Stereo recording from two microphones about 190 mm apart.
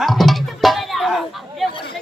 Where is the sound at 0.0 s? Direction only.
Centre (ahead or behind).